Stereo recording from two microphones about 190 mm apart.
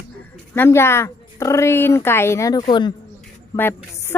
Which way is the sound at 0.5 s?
10° left (ahead or behind).